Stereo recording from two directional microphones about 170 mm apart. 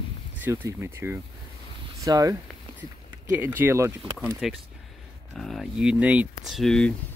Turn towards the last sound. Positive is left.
turn(degrees=5)  # may be behind; listen again after turning